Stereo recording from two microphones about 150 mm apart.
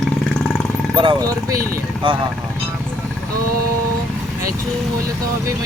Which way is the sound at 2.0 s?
35° right (ahead or behind).